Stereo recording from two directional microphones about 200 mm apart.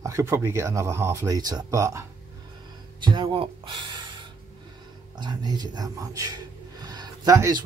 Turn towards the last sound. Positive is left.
turn(degrees=-20)  # may be behind; listen again after turning